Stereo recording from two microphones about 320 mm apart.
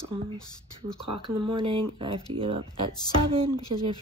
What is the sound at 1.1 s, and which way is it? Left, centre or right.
Speech, centre.